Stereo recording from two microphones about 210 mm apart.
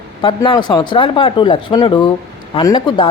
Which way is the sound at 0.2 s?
20° left (ahead or behind).